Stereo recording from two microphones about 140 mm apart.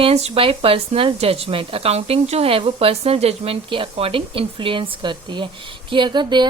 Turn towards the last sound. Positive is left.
turn(degrees=-30)  # may be behind; listen again after turning